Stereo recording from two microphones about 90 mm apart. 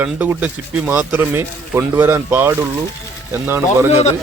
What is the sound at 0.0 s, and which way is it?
Speech, 20° right (ahead or behind).